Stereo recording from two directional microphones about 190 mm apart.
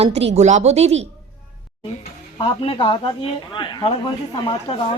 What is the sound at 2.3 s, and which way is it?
Speech, 30° left (ahead or behind).